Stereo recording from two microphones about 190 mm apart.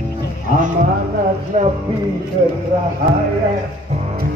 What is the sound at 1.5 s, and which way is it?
Music, 40° right (ahead or behind).